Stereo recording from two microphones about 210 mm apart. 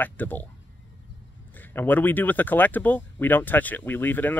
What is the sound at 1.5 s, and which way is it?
Speech, 10° left (ahead or behind).